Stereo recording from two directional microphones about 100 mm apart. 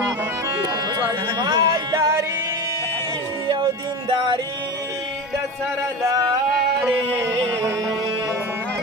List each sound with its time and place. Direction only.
1.4 s music: 45° right (ahead or behind)